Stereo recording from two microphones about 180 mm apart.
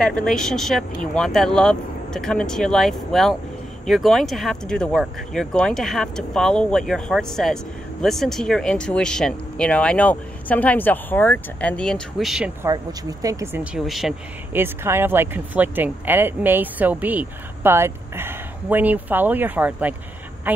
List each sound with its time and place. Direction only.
0.0 s speech: 5° left (ahead or behind)
12.6 s speech: 20° right (ahead or behind)
13.7 s speech: centre (ahead or behind)
14.5 s speech: 10° right (ahead or behind)